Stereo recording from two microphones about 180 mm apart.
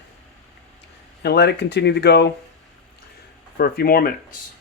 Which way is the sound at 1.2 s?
65° left (ahead or behind).